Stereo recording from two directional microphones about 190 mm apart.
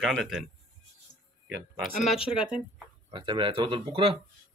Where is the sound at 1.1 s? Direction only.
40° left (ahead or behind).